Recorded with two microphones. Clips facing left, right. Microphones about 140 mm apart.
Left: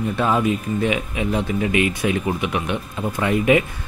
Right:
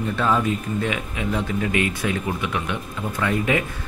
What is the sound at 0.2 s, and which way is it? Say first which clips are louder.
Speech: left 2 dB; 15° left (ahead or behind).